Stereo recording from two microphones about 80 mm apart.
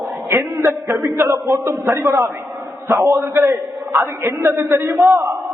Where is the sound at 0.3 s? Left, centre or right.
Right.